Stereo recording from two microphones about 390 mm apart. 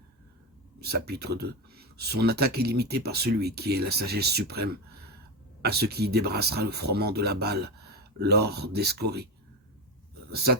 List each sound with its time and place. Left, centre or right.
0.8 s speech: right
10.3 s speech: right